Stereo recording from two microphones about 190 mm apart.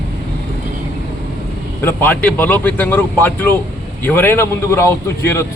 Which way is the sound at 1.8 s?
10° left (ahead or behind).